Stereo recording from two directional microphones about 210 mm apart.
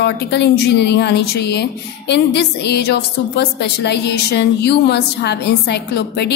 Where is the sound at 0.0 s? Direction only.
55° left (ahead or behind).